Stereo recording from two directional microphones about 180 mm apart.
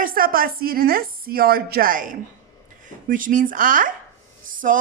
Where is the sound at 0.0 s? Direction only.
50° right (ahead or behind).